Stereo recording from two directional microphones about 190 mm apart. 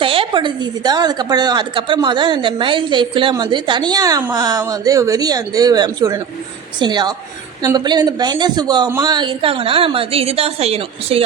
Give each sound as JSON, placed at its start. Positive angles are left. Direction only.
{"t": 0.0, "sound": "a woman's voice", "side_deg": -25}